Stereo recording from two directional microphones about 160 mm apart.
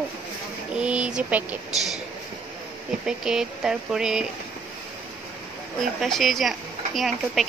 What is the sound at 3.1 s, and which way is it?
Speech, 5° right (ahead or behind).